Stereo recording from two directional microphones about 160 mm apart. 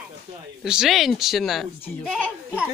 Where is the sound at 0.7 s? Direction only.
5° right (ahead or behind).